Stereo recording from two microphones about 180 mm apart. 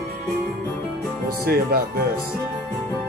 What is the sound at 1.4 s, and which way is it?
Speech, 55° right (ahead or behind).